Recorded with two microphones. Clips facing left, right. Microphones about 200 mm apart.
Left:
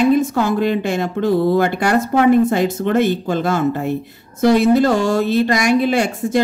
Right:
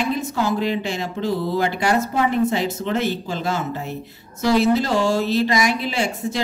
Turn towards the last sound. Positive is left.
turn(degrees=55)  # may be behind; listen again after turning